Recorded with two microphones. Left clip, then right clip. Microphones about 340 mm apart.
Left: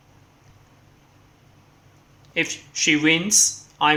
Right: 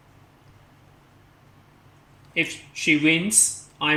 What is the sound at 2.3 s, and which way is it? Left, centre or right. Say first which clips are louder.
Speech: left 1 dB; centre.